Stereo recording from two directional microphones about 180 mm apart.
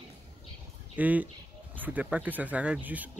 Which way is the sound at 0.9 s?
10° right (ahead or behind).